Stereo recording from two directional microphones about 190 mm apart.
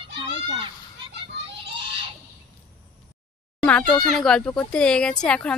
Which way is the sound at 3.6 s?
5° left (ahead or behind).